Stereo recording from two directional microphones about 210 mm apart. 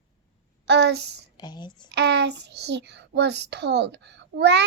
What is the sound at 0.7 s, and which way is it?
Speech, 55° right (ahead or behind).